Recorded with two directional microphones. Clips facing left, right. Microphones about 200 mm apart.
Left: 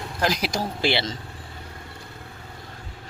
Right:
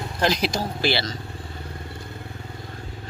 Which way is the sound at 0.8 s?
25° left (ahead or behind).